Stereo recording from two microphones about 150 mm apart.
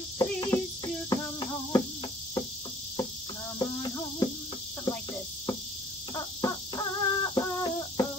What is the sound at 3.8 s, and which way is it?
Insect, 30° left (ahead or behind).